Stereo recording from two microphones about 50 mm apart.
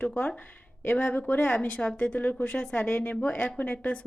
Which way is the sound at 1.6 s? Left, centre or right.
Left.